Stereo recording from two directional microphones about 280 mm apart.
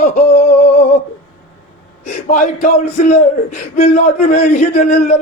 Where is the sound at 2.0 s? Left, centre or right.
Left.